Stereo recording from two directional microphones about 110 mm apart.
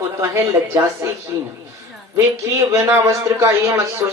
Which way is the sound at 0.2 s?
25° right (ahead or behind).